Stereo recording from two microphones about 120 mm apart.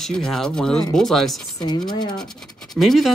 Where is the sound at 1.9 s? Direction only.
35° left (ahead or behind).